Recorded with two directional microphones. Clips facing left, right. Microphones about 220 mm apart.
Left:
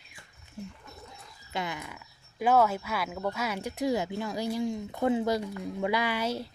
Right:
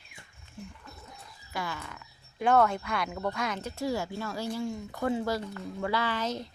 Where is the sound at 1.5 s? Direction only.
20° left (ahead or behind).